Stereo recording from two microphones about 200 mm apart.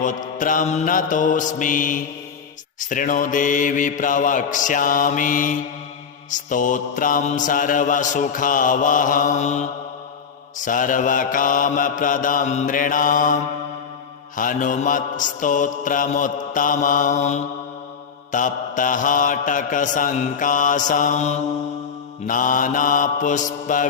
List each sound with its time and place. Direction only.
0.0 s mantra: 40° left (ahead or behind)